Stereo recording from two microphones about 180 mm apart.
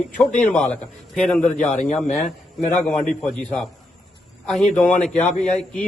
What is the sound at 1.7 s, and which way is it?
A man's voice, 40° left (ahead or behind).